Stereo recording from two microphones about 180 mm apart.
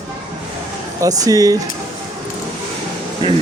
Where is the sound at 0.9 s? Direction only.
20° right (ahead or behind).